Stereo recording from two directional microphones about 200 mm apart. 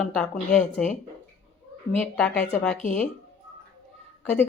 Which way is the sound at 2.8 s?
40° left (ahead or behind).